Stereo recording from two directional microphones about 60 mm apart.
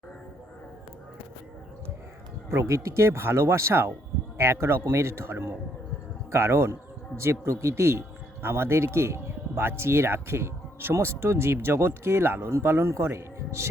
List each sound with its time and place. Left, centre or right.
2.5 s speech: right